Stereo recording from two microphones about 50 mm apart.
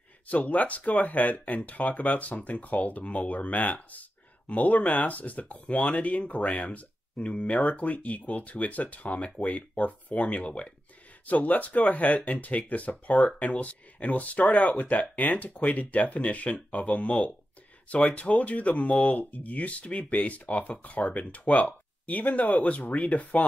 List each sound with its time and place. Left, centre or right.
0.3 s speech: left